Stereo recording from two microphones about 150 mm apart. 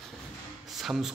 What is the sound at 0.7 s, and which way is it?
Speech, centre (ahead or behind).